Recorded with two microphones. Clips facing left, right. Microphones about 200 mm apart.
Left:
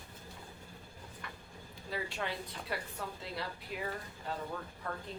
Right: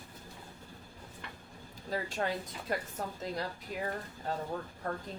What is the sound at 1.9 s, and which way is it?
A woman's voice, 40° right (ahead or behind).